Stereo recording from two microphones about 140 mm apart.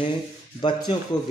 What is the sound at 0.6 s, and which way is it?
Speech, 35° left (ahead or behind).